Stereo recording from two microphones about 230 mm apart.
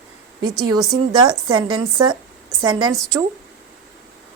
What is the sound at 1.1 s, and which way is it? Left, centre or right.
Speech, centre.